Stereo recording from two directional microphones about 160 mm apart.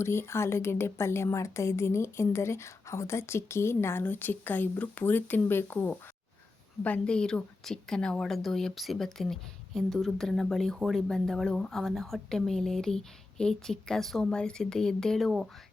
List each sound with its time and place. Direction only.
0.0 s a woman's voice: 15° left (ahead or behind)